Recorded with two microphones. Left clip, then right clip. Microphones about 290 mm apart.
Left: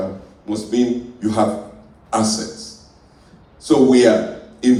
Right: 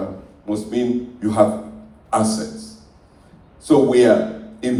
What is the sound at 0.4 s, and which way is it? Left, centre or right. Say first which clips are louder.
A man's voice: left 2 dB; right.